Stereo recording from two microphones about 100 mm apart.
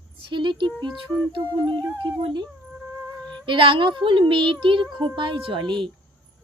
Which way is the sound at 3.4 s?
60° right (ahead or behind).